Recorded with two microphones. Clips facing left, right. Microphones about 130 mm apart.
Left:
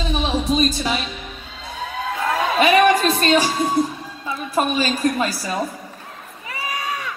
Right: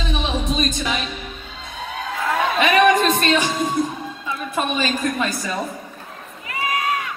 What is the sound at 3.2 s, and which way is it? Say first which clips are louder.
Music: left 2 dB; 35° left (ahead or behind).